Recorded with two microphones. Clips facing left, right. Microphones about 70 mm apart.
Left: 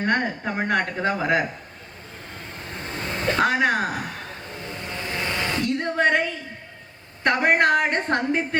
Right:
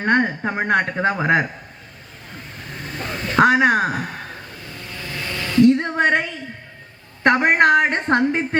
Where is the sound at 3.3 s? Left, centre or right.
Right.